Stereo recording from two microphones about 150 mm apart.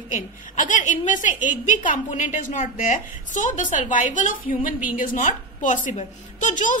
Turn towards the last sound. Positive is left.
turn(degrees=55)  # may be behind; listen again after turning